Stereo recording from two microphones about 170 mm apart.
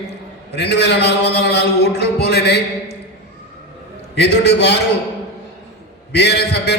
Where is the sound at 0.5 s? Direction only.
75° left (ahead or behind).